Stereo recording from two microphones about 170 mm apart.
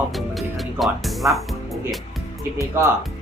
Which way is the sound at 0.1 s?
Centre (ahead or behind).